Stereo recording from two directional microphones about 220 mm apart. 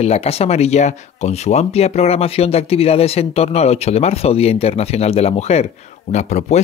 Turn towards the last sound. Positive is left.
turn(degrees=30)  # may be behind; listen again after turning